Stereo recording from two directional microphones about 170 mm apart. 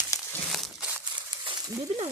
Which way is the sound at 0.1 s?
20° left (ahead or behind).